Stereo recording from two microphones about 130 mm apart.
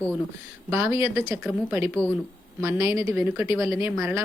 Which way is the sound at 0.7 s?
20° right (ahead or behind).